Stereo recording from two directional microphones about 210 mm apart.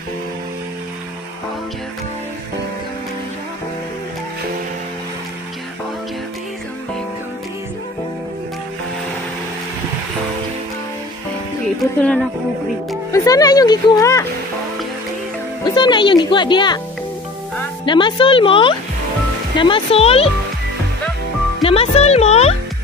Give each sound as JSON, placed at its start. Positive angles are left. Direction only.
{"t": 12.0, "sound": "speech", "side_deg": 5}
{"t": 13.1, "sound": "speech", "side_deg": 15}
{"t": 15.6, "sound": "speech", "side_deg": 20}
{"t": 17.8, "sound": "speech", "side_deg": 20}
{"t": 21.6, "sound": "speech", "side_deg": 30}